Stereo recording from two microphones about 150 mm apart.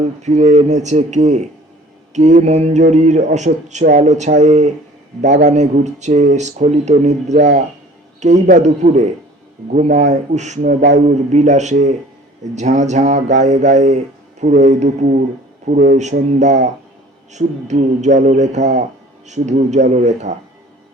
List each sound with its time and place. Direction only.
0.2 s speech: 50° right (ahead or behind)